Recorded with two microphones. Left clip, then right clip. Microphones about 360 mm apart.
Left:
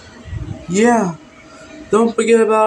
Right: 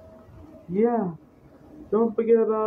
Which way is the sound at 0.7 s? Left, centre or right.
Right.